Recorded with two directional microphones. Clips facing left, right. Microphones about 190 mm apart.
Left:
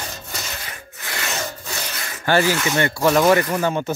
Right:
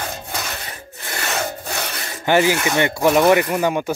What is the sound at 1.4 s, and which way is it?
Wood, 60° right (ahead or behind).